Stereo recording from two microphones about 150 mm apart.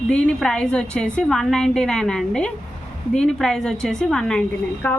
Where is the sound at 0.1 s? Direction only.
5° left (ahead or behind).